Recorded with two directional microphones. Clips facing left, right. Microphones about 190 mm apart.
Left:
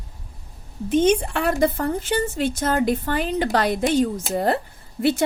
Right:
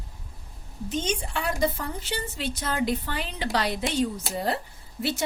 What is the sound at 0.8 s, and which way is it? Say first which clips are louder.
A woman's voice: left 11 dB; 55° left (ahead or behind).